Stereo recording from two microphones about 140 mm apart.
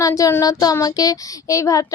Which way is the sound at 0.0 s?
25° left (ahead or behind).